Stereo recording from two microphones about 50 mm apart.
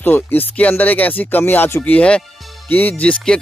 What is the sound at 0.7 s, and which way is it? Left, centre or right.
Music, left.